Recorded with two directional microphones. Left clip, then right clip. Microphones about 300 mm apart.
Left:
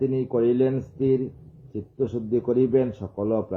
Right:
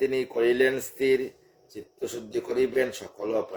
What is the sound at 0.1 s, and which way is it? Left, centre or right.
Speech, right.